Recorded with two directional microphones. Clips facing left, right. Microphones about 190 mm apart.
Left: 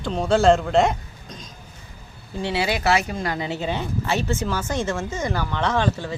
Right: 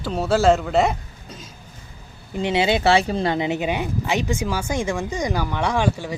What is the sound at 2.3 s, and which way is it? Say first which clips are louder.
Speech: right 4 dB; 20° right (ahead or behind).